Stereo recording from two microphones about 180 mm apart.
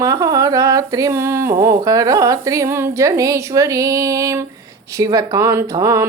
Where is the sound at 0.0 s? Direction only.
20° right (ahead or behind).